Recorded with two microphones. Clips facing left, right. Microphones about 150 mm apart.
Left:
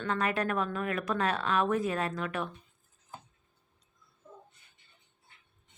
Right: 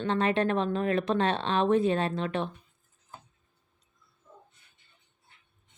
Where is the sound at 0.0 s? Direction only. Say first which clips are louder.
Right 5 dB; 25° right (ahead or behind).